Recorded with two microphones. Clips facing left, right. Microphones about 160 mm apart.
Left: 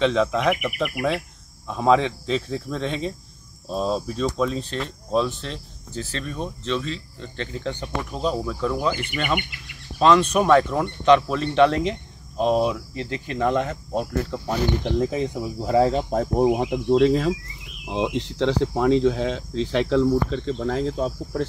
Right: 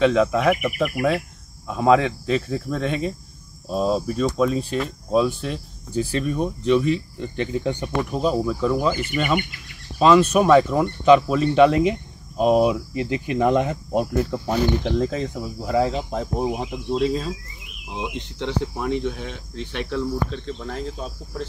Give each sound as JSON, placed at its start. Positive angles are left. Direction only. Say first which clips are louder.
{"t": 0.0, "sound": "speech", "louder": "right 3 dB", "side_deg": -5}
{"t": 14.9, "sound": "speech", "louder": "even", "side_deg": 10}
{"t": 15.7, "sound": "speech", "louder": "left 2 dB", "side_deg": 35}
{"t": 16.1, "sound": "speech", "louder": "left 4 dB", "side_deg": 45}
{"t": 16.5, "sound": "cricket", "louder": "left 5 dB", "side_deg": 60}
{"t": 17.8, "sound": "speech", "louder": "left 6 dB", "side_deg": 90}